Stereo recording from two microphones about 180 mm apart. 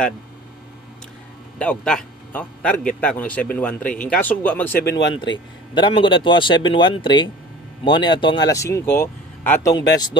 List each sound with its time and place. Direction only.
1.6 s speech: 5° left (ahead or behind)
5.1 s speech: 25° left (ahead or behind)